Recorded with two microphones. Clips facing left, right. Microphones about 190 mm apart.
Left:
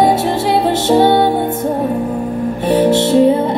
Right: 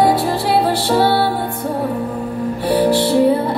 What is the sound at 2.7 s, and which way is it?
Music, 20° left (ahead or behind).